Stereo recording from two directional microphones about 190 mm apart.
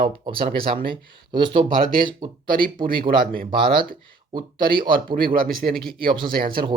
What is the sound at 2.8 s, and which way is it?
Speech, 50° right (ahead or behind).